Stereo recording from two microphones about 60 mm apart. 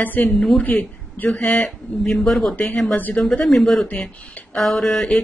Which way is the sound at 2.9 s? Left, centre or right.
Left.